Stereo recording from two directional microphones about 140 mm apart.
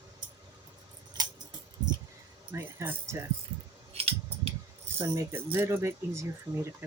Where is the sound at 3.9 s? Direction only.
45° right (ahead or behind).